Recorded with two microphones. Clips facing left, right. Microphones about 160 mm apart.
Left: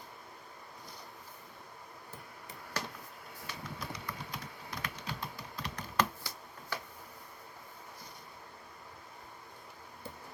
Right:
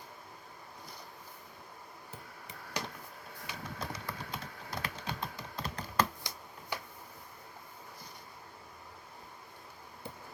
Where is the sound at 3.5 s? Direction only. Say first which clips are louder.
Right 2 dB; 25° right (ahead or behind).